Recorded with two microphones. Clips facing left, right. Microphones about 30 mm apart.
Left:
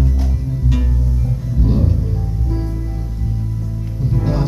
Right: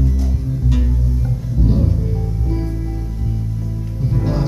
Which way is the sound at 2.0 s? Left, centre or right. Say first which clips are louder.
Right 1 dB; centre.